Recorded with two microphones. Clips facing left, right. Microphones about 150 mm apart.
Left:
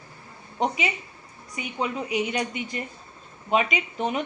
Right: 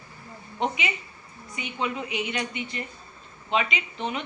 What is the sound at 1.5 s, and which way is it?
A woman's voice, 40° left (ahead or behind).